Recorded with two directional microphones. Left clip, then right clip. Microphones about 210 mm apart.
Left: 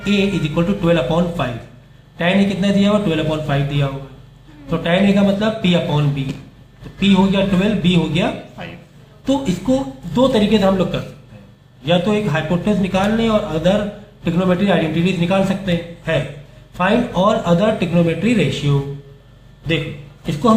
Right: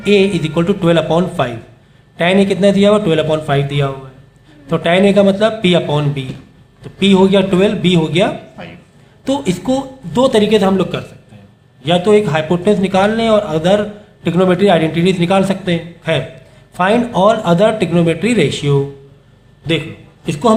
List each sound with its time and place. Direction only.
0.0 s a man's voice: 50° right (ahead or behind)